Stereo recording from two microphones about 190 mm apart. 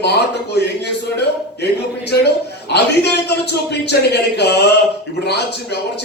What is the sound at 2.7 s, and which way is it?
A man's voice, 60° left (ahead or behind).